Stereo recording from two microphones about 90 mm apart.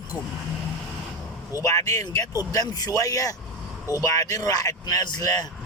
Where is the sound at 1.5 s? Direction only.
40° left (ahead or behind).